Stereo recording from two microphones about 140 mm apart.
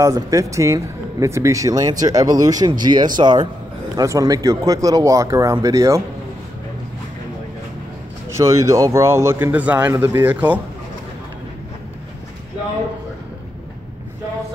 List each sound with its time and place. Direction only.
0.0 s a man's voice: 25° right (ahead or behind)
8.4 s a man's voice: 20° right (ahead or behind)